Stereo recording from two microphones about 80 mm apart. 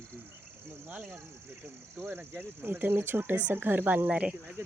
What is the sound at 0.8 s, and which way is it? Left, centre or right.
Speech, right.